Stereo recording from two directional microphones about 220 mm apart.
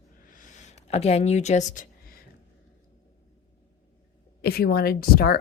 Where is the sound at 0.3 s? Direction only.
35° left (ahead or behind).